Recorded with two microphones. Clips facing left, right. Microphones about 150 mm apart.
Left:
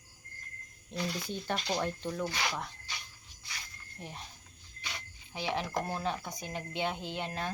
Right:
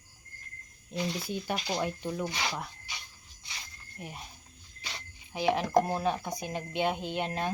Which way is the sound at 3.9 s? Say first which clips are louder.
Right 2 dB; 10° right (ahead or behind).